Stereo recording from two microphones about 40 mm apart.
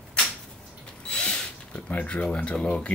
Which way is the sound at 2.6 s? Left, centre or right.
Left.